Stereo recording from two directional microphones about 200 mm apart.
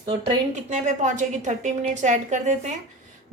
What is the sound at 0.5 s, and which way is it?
A woman's voice, 35° right (ahead or behind).